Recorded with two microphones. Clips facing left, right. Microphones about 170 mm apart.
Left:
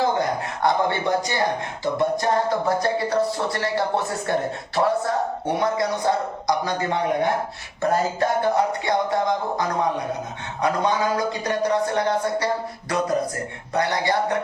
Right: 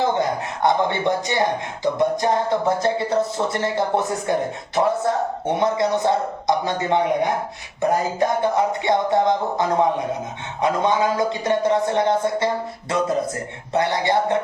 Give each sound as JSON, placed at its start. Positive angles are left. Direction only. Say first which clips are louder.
{"t": 0.2, "sound": "speech", "louder": "right 2 dB", "side_deg": -20}
{"t": 13.7, "sound": "speech", "louder": "right 2 dB", "side_deg": -25}